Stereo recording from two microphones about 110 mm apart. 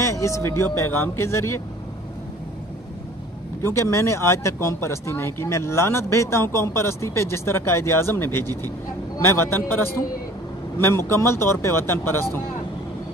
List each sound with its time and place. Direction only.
0.0 s speech: 30° left (ahead or behind)
3.7 s speech: 25° left (ahead or behind)